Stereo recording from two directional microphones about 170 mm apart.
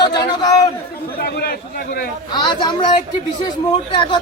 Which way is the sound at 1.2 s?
65° left (ahead or behind).